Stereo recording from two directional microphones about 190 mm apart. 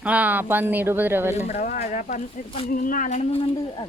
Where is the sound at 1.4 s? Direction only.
35° left (ahead or behind).